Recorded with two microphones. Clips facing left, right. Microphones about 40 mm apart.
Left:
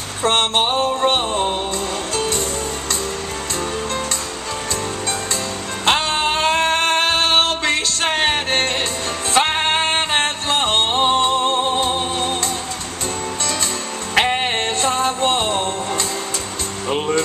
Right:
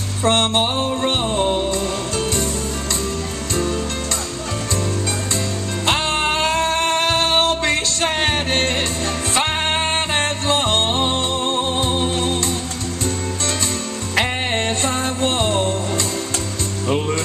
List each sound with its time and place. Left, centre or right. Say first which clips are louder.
0.2 s music: even; left
1.4 s music: right 2 dB; centre
1.7 s music: right 1 dB; left
5.9 s music: left 2 dB; left
14.1 s music: left 3 dB; left